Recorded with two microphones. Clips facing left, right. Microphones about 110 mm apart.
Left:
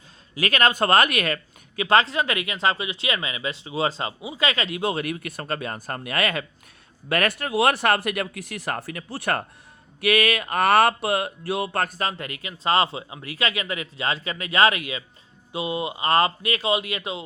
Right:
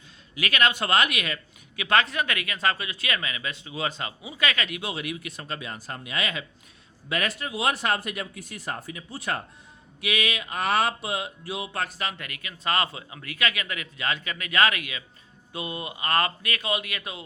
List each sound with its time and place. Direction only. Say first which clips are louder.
0.3 s speech: left 4 dB; 40° left (ahead or behind)
4.9 s speech: left 6 dB; 45° left (ahead or behind); by 9.4 s 65° left (ahead or behind)
10.0 s speech: left 7 dB; 50° left (ahead or behind)
12.0 s speech: left 5 dB; 30° left (ahead or behind)